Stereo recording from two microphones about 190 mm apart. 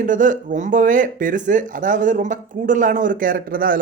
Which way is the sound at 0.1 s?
45° right (ahead or behind).